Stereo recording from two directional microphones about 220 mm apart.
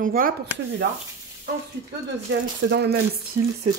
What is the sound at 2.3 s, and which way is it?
Speech, 55° right (ahead or behind).